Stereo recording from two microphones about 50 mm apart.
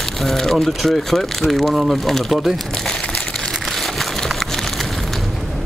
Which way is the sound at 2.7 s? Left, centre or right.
Centre.